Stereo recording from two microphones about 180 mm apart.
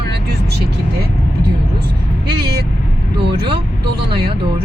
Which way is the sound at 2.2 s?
60° right (ahead or behind).